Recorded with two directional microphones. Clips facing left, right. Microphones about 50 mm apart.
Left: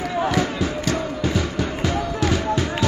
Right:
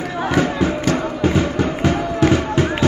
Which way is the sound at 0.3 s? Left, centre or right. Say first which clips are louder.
Right 4 dB; right.